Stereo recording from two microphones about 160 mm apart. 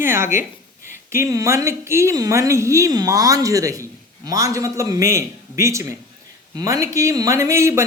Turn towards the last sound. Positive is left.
turn(degrees=-15)  # may be behind; listen again after turning